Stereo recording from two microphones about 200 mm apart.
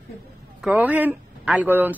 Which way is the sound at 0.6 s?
5° right (ahead or behind).